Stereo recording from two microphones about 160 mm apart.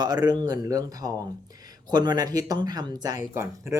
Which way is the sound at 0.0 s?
25° right (ahead or behind).